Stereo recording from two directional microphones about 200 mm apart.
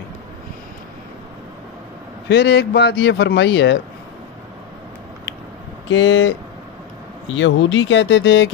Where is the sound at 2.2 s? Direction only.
55° left (ahead or behind).